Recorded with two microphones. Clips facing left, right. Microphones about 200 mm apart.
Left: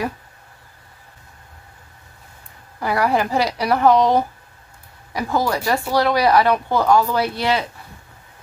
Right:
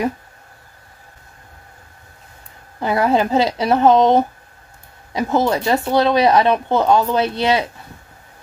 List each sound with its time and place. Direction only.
2.8 s speech: 20° right (ahead or behind)